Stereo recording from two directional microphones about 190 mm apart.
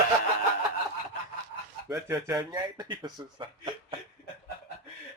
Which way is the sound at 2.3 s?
20° right (ahead or behind).